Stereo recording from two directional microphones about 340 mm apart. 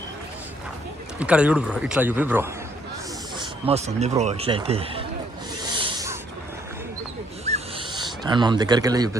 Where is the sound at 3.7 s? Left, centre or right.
Centre.